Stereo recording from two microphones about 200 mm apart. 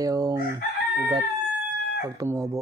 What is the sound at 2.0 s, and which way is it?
Speech, 15° right (ahead or behind).